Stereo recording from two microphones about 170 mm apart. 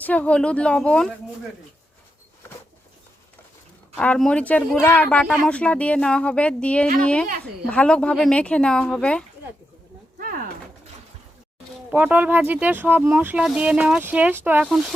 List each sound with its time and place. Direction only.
0.0 s speech: 10° left (ahead or behind)
3.9 s speech: 5° left (ahead or behind)
7.3 s speech: 65° right (ahead or behind)
7.7 s speech: 5° left (ahead or behind)
10.2 s a sound: 55° right (ahead or behind)
11.9 s speech: 10° right (ahead or behind)
14.7 s speech: centre (ahead or behind)